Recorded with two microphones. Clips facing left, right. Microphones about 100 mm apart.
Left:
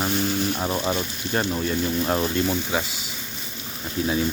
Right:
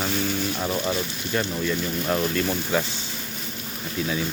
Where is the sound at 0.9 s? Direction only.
35° left (ahead or behind).